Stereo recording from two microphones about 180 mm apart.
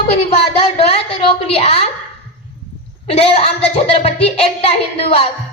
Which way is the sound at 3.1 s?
35° left (ahead or behind).